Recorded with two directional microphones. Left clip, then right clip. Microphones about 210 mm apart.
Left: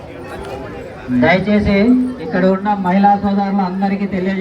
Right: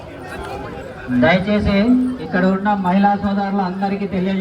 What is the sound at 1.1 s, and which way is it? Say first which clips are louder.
A man's voice: left 2 dB; 40° left (ahead or behind).